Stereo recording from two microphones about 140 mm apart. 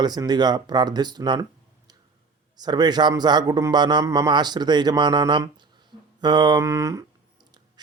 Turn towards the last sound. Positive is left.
turn(degrees=-25)  # may be behind; listen again after turning